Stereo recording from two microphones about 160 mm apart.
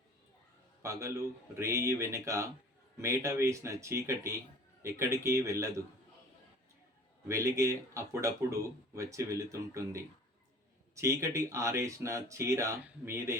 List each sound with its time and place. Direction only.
0.8 s a man's voice: 20° right (ahead or behind)
7.3 s speech: 20° right (ahead or behind)